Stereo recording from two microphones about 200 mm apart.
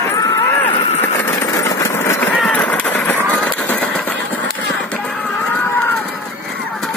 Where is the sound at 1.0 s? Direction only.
10° left (ahead or behind).